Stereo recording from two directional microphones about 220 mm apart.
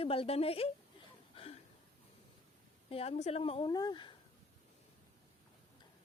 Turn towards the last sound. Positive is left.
turn(degrees=20)  # may be behind; listen again after turning